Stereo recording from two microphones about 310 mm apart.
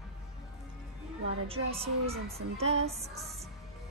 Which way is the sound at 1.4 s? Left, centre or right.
Centre.